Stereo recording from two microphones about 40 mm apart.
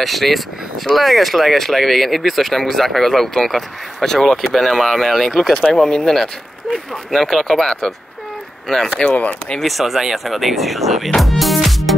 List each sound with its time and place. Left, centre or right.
0.0 s speech: centre
4.6 s speech: centre
9.1 s speech: left
9.6 s speech: centre
11.1 s music: centre